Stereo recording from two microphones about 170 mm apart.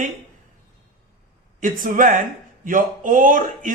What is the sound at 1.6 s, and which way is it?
Speech, 50° right (ahead or behind).